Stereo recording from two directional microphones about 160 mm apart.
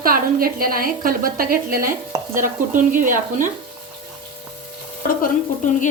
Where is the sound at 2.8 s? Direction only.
55° right (ahead or behind).